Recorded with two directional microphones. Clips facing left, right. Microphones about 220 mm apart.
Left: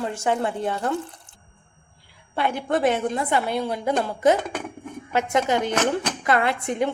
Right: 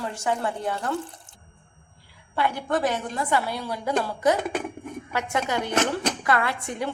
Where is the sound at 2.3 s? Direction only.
25° left (ahead or behind).